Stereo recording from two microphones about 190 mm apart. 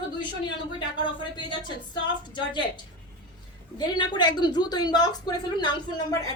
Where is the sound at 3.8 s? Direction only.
25° left (ahead or behind).